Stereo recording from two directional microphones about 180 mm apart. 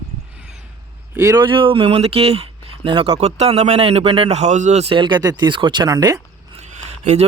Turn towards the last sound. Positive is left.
turn(degrees=-40)  # may be behind; listen again after turning